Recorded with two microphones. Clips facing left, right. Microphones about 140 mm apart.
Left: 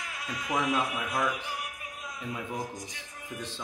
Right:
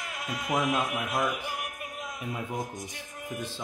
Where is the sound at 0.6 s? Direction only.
Centre (ahead or behind).